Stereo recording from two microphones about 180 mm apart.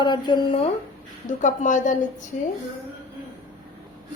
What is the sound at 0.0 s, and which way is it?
Speech, 25° left (ahead or behind).